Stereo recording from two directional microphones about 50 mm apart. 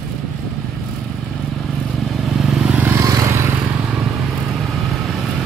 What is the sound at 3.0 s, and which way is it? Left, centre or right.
Vehicle, right.